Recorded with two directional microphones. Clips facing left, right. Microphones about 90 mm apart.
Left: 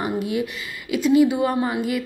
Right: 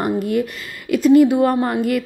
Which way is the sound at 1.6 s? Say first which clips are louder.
Right 4 dB; 50° right (ahead or behind).